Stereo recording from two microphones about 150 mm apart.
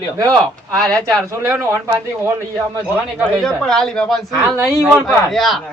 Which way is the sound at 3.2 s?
5° left (ahead or behind).